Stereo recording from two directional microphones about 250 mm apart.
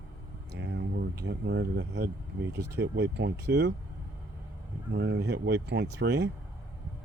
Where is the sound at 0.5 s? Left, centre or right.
Right.